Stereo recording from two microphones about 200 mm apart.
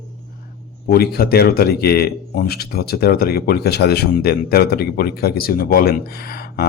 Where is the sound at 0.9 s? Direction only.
50° left (ahead or behind).